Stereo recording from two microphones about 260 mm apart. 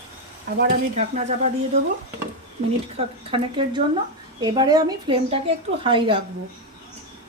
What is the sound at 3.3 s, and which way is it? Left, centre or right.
A woman's voice, right.